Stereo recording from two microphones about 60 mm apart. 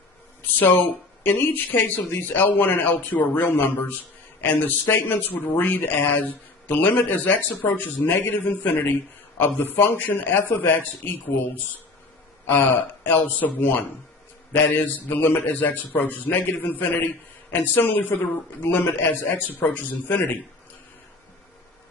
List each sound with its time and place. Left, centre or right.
1.2 s speech: left
12.4 s a man's voice: left
19.6 s speech: left